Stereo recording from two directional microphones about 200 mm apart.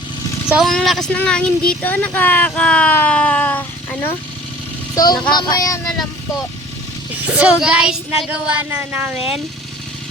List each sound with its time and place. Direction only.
0.4 s speech: centre (ahead or behind)
4.9 s speech: 20° left (ahead or behind)
7.3 s child singing: 5° right (ahead or behind)